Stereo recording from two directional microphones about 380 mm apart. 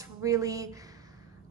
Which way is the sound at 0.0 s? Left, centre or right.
Centre.